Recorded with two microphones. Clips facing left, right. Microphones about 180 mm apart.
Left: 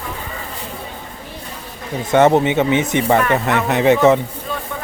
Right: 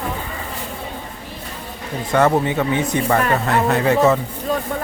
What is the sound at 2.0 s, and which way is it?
Speech, 20° left (ahead or behind).